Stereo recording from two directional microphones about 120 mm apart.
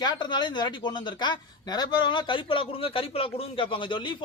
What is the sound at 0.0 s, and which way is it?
Speech, 35° left (ahead or behind).